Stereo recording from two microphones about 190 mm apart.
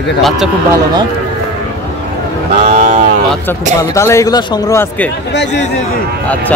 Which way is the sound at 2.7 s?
40° right (ahead or behind).